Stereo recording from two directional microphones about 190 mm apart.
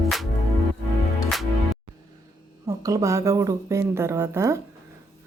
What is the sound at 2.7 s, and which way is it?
Speech, 15° right (ahead or behind).